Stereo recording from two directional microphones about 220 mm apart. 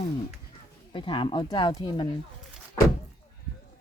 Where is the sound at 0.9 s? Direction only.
20° left (ahead or behind).